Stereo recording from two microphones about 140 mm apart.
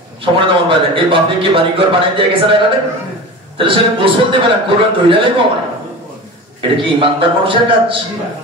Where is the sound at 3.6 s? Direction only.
40° right (ahead or behind).